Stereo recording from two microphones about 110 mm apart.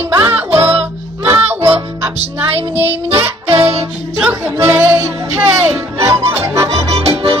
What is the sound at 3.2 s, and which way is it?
Music, 20° right (ahead or behind).